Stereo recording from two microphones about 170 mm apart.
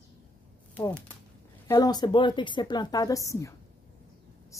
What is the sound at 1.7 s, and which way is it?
Speech, 25° left (ahead or behind).